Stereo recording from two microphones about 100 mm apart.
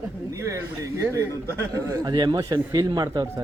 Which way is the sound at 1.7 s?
40° right (ahead or behind).